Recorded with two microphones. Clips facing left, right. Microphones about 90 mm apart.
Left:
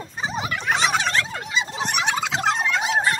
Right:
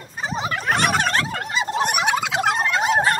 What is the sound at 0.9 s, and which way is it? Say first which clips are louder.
Turkey: right 2 dB; 50° right (ahead or behind).